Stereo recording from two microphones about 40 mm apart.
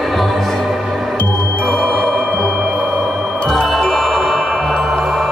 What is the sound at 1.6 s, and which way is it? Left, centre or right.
Music, left.